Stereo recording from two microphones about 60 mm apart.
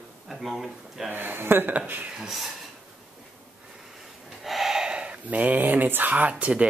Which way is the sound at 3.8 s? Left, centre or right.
Centre.